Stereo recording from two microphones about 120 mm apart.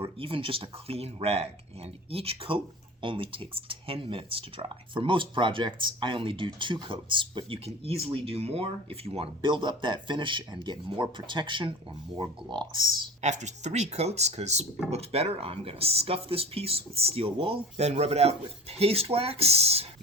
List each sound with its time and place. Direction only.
0.0 s speech: 50° right (ahead or behind)
7.6 s speech: 55° right (ahead or behind)
13.2 s speech: 75° right (ahead or behind); by 19.9 s 60° right (ahead or behind)